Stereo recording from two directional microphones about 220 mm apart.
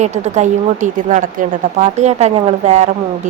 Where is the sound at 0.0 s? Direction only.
30° right (ahead or behind).